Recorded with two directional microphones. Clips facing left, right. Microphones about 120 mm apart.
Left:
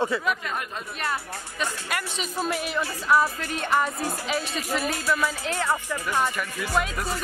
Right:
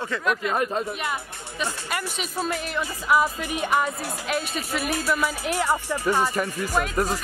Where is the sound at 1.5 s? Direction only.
Centre (ahead or behind).